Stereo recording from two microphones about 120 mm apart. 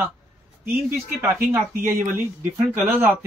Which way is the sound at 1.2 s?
20° right (ahead or behind).